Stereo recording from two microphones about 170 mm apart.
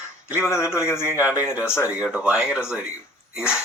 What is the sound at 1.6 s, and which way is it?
Speech, 15° left (ahead or behind).